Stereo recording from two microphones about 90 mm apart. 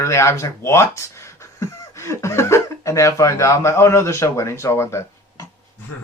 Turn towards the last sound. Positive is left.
turn(degrees=30)  # may be behind; listen again after turning